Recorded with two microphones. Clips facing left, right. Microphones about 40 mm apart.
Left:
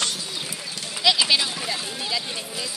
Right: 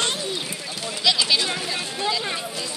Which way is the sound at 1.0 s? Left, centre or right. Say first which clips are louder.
Left 1 dB; centre.